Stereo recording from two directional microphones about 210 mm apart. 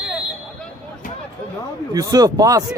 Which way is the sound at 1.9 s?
15° right (ahead or behind).